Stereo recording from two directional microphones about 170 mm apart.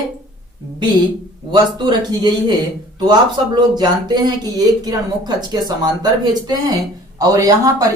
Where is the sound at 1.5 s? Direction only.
25° right (ahead or behind).